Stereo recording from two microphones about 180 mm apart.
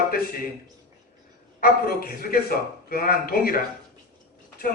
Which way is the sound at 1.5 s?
55° left (ahead or behind).